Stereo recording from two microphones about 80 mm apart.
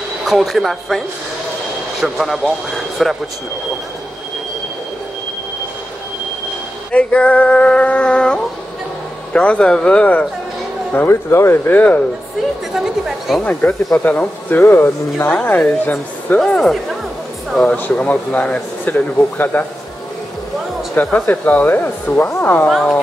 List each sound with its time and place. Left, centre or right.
0.2 s speech: centre
6.9 s a sound: centre
10.9 s speech: left
12.7 s speech: centre
13.4 s speech: left
15.3 s speech: centre
16.3 s a sound: centre
17.6 s speech: left
20.9 s speech: left
22.7 s speech: centre